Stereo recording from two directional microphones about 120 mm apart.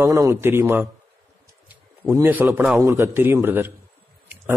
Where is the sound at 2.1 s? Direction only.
15° right (ahead or behind).